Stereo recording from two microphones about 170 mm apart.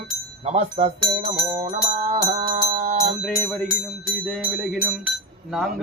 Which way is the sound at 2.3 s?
40° right (ahead or behind).